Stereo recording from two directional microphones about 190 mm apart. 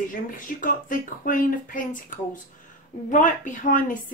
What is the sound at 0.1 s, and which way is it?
Speech, 45° left (ahead or behind).